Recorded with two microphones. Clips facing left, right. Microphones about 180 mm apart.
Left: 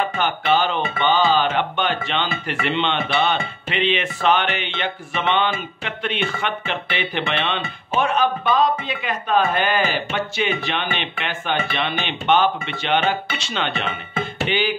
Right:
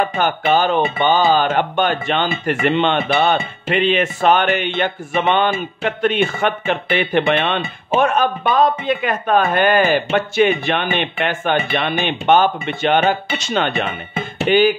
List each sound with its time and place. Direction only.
0.0 s speech: 45° right (ahead or behind)